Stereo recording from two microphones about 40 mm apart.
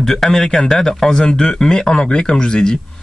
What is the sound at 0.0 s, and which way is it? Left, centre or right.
Speech, centre.